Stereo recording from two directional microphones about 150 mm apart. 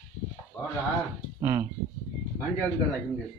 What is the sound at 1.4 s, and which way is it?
Speech, 20° right (ahead or behind).